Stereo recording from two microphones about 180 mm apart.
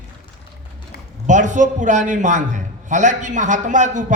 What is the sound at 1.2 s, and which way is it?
A man's voice, 45° right (ahead or behind).